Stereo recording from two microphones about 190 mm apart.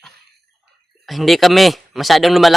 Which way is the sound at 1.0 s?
Centre (ahead or behind).